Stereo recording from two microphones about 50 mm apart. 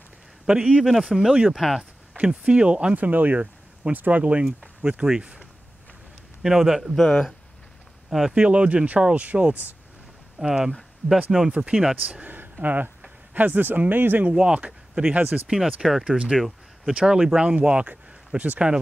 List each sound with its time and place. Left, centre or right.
0.5 s speech: centre
0.8 s speech: centre
1.8 s speech: right
3.1 s speech: right; by 5.5 s centre
6.4 s speech: centre
7.0 s speech: centre
8.1 s speech: centre
8.4 s speech: right
10.4 s speech: centre
11.9 s speech: right
14.3 s speech: centre
15.5 s speech: centre
16.3 s a sound: centre
17.0 s speech: centre